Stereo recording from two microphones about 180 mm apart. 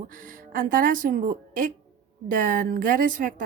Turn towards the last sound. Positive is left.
turn(degrees=-50)  # may be behind; listen again after turning